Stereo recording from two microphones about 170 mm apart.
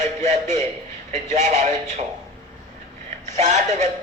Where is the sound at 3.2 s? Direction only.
45° right (ahead or behind).